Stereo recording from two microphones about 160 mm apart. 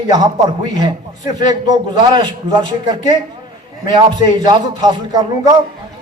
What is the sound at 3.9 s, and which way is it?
A man's voice, 25° right (ahead or behind).